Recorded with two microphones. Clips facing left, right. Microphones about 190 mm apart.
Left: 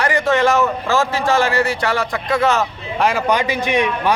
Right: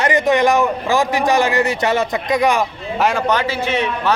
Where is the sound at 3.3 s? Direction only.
15° left (ahead or behind).